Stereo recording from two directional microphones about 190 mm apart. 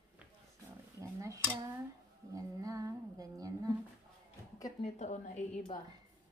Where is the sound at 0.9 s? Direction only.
15° right (ahead or behind).